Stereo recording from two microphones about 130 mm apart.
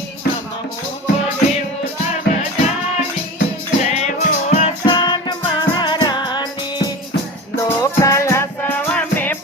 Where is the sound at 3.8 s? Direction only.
60° left (ahead or behind).